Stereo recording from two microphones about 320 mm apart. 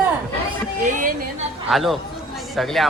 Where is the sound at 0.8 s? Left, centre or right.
Right.